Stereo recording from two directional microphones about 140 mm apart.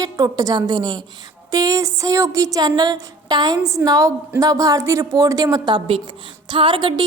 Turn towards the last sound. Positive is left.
turn(degrees=-35)  # may be behind; listen again after turning